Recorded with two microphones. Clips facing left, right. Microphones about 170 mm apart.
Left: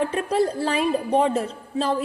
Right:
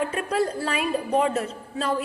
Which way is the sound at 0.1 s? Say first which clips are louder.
Left 3 dB; 30° left (ahead or behind).